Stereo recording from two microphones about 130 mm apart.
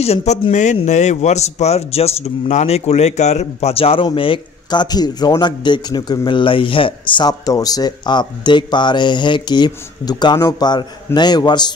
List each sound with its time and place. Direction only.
0.0 s speech: 55° left (ahead or behind)
0.5 s speech: 65° left (ahead or behind); by 11.7 s 35° left (ahead or behind)